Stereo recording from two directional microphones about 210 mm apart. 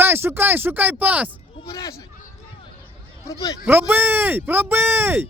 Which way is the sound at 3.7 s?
10° right (ahead or behind).